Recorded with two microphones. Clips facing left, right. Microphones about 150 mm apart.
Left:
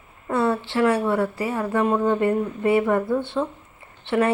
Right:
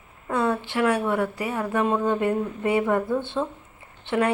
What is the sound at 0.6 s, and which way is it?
Speech, 15° right (ahead or behind).